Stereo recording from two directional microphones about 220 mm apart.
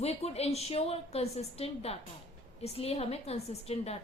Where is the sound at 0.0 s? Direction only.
30° left (ahead or behind).